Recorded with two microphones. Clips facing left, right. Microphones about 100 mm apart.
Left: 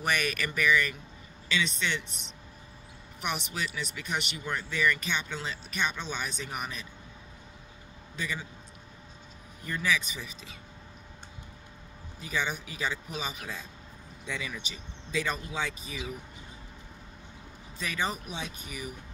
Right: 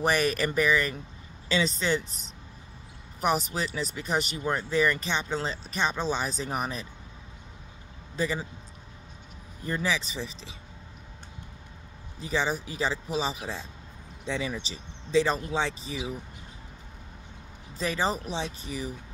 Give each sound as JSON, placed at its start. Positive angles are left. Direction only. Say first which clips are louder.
{"t": 0.0, "sound": "speech", "louder": "right 5 dB", "side_deg": -35}
{"t": 8.2, "sound": "speech", "louder": "right 7 dB", "side_deg": -35}
{"t": 9.7, "sound": "speech", "louder": "right 1 dB", "side_deg": -30}
{"t": 12.2, "sound": "speech", "louder": "right 5 dB", "side_deg": -30}
{"t": 17.7, "sound": "speech", "louder": "right 5 dB", "side_deg": -30}